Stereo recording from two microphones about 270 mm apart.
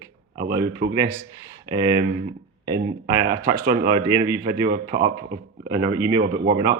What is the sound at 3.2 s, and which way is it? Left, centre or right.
Speech, right.